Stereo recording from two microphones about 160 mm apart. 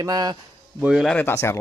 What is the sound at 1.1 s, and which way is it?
Speech, 15° left (ahead or behind).